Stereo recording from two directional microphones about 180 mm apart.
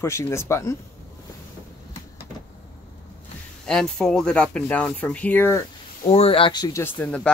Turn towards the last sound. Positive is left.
turn(degrees=5)  # may be behind; listen again after turning